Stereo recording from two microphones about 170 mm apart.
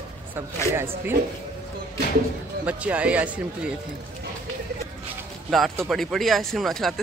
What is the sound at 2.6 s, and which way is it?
Speech, 10° right (ahead or behind).